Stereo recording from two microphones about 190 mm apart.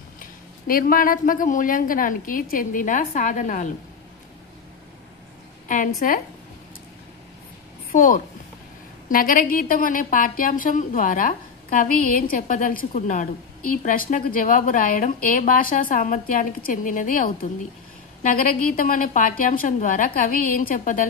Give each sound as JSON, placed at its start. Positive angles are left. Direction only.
{"t": 0.2, "sound": "a woman's voice", "side_deg": 50}
{"t": 5.9, "sound": "a woman's voice", "side_deg": 45}
{"t": 7.9, "sound": "a woman's voice", "side_deg": 45}